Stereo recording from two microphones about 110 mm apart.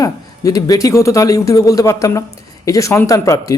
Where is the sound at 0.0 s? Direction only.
30° left (ahead or behind).